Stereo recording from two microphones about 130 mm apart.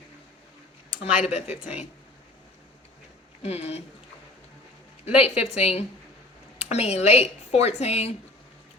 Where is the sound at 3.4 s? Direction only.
55° left (ahead or behind).